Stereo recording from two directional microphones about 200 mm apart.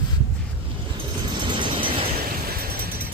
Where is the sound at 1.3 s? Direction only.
25° right (ahead or behind).